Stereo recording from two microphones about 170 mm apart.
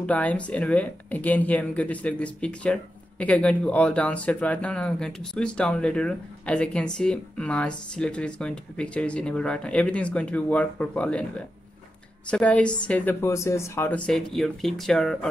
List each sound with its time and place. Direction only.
0.0 s speech: 10° left (ahead or behind)